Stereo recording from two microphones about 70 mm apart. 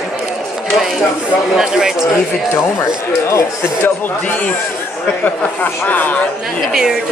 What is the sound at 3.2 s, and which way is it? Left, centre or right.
Speech, left.